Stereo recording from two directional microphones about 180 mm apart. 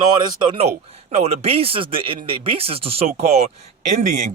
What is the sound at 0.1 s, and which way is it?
A man's voice, 25° right (ahead or behind).